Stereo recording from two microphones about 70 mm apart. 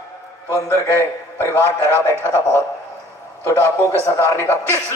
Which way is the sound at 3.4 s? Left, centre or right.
Left.